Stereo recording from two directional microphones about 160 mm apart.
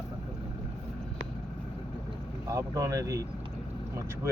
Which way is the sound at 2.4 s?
20° right (ahead or behind).